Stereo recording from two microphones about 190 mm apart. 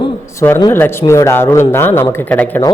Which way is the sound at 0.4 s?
15° left (ahead or behind).